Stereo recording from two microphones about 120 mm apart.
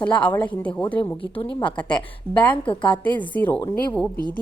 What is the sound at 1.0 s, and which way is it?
Speech, 45° left (ahead or behind).